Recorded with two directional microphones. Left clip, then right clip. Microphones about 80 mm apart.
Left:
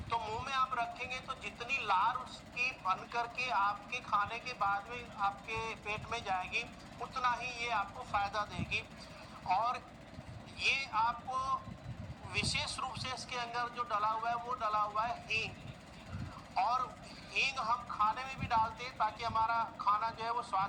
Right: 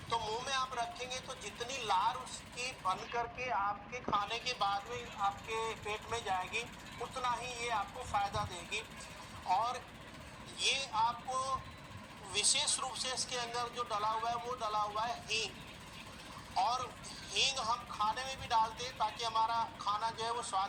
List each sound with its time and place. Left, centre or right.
0.1 s vehicle: right
2.6 s speech: right
4.2 s speech: right
5.2 s speech: centre
11.3 s speech: right
16.6 s speech: right